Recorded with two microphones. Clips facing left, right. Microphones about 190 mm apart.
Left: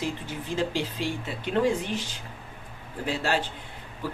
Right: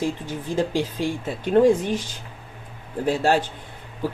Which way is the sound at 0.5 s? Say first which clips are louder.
Right 5 dB; 50° right (ahead or behind).